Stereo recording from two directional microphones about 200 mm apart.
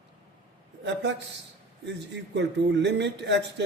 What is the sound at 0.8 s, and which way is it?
Speech, 60° right (ahead or behind).